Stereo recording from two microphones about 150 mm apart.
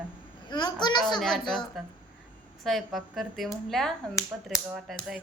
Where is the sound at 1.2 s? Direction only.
5° left (ahead or behind).